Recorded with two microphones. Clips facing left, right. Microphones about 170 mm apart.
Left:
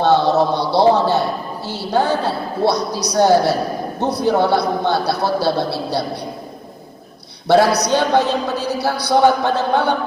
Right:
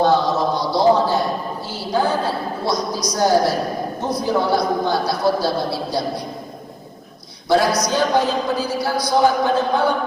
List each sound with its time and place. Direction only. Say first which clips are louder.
0.0 s a sound: left 2 dB; 65° left (ahead or behind)
4.1 s a man's voice: left 3 dB; 65° left (ahead or behind)
7.4 s a man's voice: left 3 dB; 65° left (ahead or behind)